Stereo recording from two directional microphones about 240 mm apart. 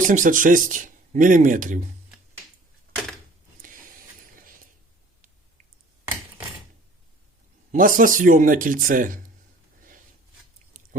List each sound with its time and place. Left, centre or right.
0.1 s speech: right
4.4 s a sound: right
7.7 s speech: right